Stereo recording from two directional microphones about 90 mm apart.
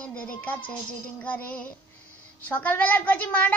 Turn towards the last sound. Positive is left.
turn(degrees=20)  # may be behind; listen again after turning